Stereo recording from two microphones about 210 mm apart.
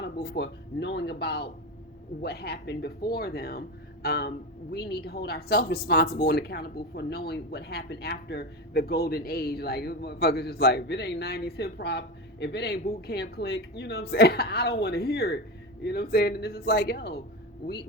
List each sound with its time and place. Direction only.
0.0 s a woman's voice: 50° left (ahead or behind)